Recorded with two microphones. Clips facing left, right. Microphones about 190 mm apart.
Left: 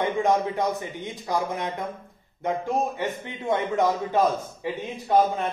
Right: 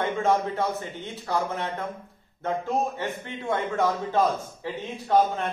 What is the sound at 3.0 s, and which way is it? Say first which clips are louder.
A man's voice: left 2 dB; 15° left (ahead or behind).